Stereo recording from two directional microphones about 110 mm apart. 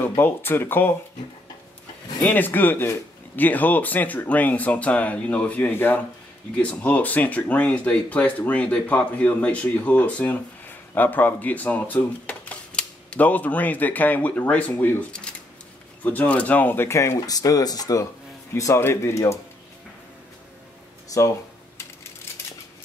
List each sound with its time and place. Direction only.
0.0 s speech: 20° left (ahead or behind)
2.2 s speech: 15° left (ahead or behind); by 18.0 s 35° left (ahead or behind)
18.5 s speech: 25° left (ahead or behind)
21.1 s speech: 30° left (ahead or behind)